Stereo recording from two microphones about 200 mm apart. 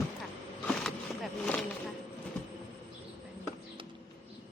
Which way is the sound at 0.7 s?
5° left (ahead or behind).